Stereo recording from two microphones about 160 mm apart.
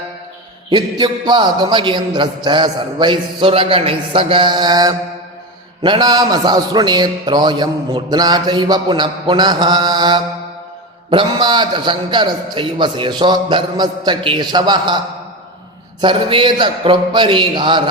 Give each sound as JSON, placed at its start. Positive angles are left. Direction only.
{"t": 0.7, "sound": "a man's voice", "side_deg": -25}
{"t": 16.0, "sound": "a man's voice", "side_deg": -30}